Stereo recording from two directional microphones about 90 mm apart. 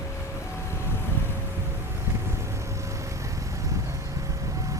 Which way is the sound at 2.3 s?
30° right (ahead or behind).